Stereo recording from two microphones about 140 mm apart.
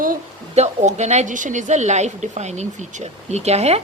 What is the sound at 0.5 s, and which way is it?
A woman's voice, 55° right (ahead or behind).